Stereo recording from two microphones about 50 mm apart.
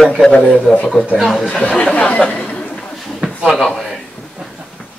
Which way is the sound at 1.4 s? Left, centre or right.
Left.